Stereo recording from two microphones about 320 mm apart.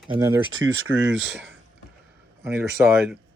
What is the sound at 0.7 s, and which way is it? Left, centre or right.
Speech, right.